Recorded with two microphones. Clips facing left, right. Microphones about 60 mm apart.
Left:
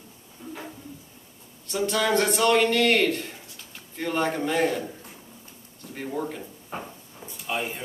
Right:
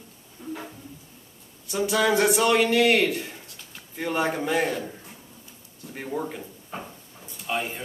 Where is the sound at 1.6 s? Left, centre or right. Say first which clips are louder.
Right 2 dB; centre.